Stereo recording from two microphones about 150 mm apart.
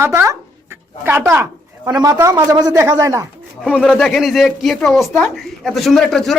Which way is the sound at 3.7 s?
10° left (ahead or behind).